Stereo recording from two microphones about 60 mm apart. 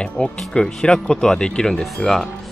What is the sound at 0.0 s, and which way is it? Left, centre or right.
Speech, centre.